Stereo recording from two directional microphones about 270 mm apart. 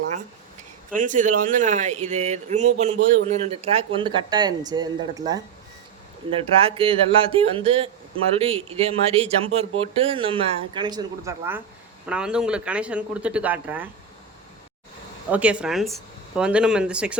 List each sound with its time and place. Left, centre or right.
0.9 s a man's voice: right; by 13.9 s centre
15.3 s speech: centre